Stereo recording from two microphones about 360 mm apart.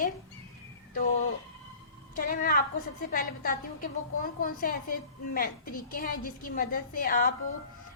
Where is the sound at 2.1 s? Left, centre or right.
Left.